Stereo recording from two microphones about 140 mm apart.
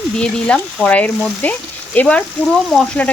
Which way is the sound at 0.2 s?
5° left (ahead or behind).